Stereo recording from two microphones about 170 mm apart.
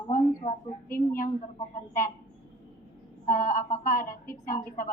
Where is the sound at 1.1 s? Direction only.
55° left (ahead or behind).